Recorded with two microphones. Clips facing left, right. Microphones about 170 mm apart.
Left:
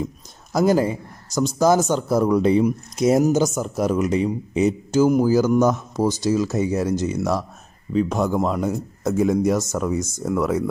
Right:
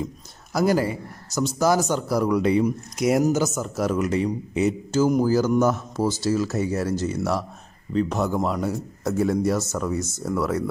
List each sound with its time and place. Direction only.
0.5 s a man's voice: 20° left (ahead or behind)